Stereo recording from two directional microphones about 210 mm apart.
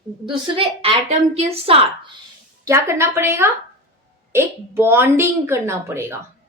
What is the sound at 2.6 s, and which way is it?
A woman's voice, 15° right (ahead or behind).